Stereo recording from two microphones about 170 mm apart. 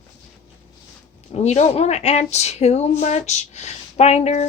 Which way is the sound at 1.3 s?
40° left (ahead or behind).